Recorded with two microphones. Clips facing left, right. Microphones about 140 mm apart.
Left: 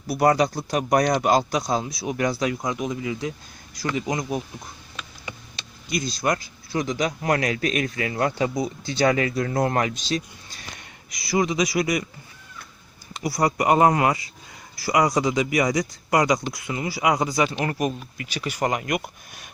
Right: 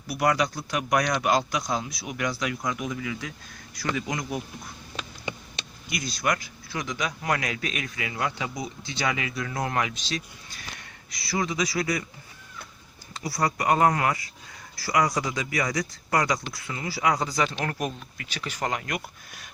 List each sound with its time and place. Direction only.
0.1 s speech: 35° left (ahead or behind)
5.9 s speech: 25° left (ahead or behind)
10.8 s speech: 20° left (ahead or behind)
13.1 s speech: 20° left (ahead or behind)